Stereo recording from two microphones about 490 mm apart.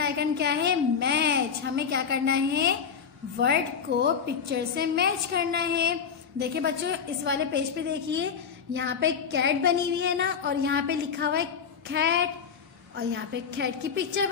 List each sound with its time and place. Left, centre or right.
0.0 s a woman's voice: centre